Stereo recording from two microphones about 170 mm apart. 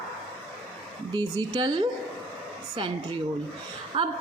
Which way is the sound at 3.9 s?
30° right (ahead or behind).